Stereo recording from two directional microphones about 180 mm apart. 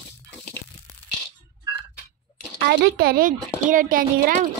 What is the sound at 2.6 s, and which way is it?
Speech, 60° right (ahead or behind).